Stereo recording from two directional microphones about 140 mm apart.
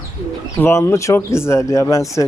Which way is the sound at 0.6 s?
20° left (ahead or behind).